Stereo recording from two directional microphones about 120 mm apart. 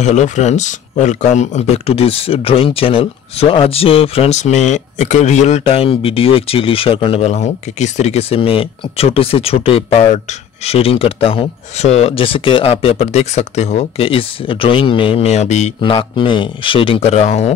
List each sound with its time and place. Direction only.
0.0 s speech: 75° left (ahead or behind); by 4.4 s 55° left (ahead or behind)
4.4 s speech: 75° left (ahead or behind)
15.8 s speech: 45° left (ahead or behind); by 17.5 s 65° left (ahead or behind)